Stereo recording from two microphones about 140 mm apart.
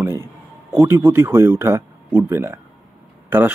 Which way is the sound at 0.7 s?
20° right (ahead or behind).